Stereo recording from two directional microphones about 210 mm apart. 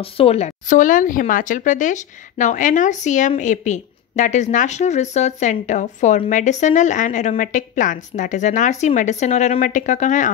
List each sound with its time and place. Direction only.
0.0 s speech: 30° left (ahead or behind)